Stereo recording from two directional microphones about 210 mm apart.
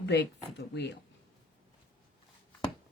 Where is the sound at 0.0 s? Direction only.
55° left (ahead or behind).